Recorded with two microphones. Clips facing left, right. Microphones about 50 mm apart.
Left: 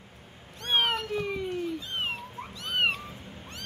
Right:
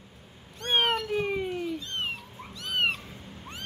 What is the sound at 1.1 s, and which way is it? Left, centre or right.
Cat, right.